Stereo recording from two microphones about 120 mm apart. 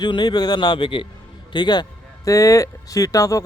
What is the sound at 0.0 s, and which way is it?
Speech, 40° left (ahead or behind).